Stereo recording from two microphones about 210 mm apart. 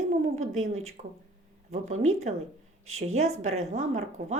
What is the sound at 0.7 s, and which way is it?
Speech, 30° right (ahead or behind).